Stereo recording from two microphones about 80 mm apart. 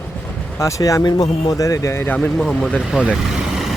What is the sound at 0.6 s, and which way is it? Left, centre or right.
Speech, left.